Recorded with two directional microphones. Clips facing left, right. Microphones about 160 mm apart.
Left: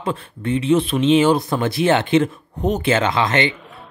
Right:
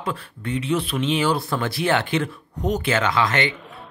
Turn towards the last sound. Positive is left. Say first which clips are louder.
# left 3 dB
turn(degrees=25)  # may be behind; listen again after turning